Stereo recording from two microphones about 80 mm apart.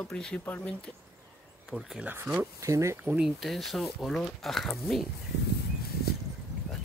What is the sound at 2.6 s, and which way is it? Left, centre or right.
Speech, right.